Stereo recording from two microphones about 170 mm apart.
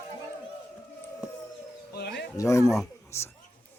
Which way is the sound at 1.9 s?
70° left (ahead or behind).